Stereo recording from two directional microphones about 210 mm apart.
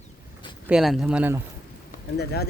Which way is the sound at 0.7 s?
Centre (ahead or behind).